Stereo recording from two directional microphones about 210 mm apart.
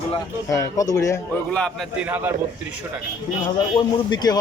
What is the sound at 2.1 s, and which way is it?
Speech, 10° right (ahead or behind).